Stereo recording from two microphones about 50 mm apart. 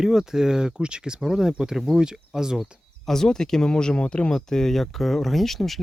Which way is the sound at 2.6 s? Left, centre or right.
Centre.